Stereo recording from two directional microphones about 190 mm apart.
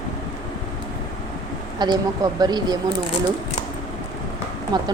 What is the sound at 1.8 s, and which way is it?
Speech, 20° right (ahead or behind).